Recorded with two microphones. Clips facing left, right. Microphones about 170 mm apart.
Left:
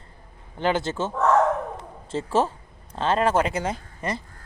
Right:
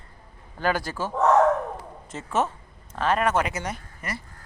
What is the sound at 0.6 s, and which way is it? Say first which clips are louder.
Speech: left 2 dB; 25° left (ahead or behind).